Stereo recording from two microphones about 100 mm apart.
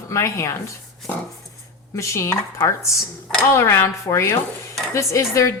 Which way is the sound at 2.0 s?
30° left (ahead or behind).